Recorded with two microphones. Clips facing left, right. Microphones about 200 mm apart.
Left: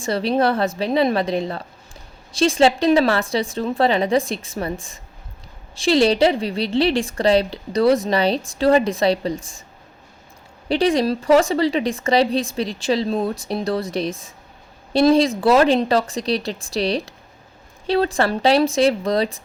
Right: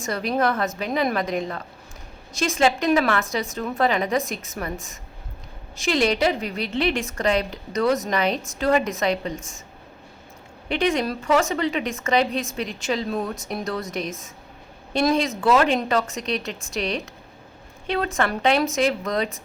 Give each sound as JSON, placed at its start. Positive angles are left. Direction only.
{"t": 0.0, "sound": "a woman's voice", "side_deg": 30}
{"t": 10.7, "sound": "a woman's voice", "side_deg": 35}